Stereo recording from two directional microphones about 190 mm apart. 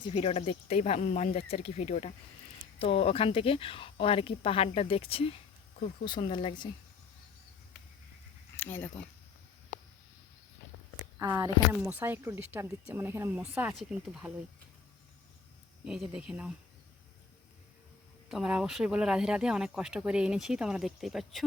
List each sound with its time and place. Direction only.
0.0 s speech: 30° left (ahead or behind)
8.5 s a sound: 10° left (ahead or behind)
11.2 s speech: 15° right (ahead or behind)
15.8 s speech: 5° right (ahead or behind)
18.3 s speech: 5° right (ahead or behind)